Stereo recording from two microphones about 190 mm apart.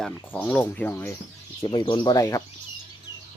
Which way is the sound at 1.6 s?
25° left (ahead or behind).